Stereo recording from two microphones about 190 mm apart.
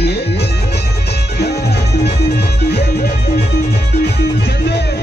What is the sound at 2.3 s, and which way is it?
Music, 60° left (ahead or behind).